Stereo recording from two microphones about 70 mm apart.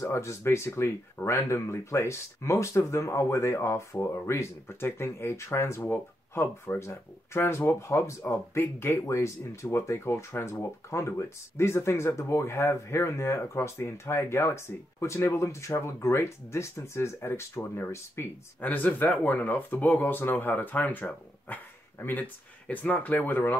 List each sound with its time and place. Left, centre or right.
0.0 s speech: left
18.6 s speech: left